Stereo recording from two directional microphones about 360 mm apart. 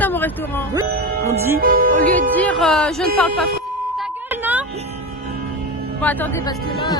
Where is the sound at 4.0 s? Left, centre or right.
Centre.